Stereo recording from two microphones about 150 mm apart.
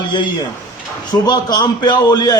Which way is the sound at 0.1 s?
30° left (ahead or behind).